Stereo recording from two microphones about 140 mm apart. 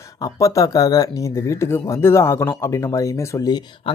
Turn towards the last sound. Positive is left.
turn(degrees=30)  # may be behind; listen again after turning